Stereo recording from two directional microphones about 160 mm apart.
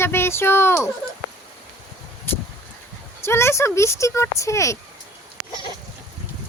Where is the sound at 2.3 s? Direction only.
15° left (ahead or behind).